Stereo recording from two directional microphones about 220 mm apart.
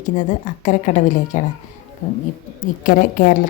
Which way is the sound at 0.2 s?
35° left (ahead or behind).